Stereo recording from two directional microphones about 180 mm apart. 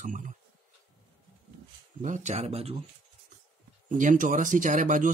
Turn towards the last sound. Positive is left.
turn(degrees=-45)  # may be behind; listen again after turning